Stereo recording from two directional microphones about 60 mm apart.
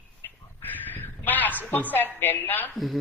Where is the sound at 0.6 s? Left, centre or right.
Left.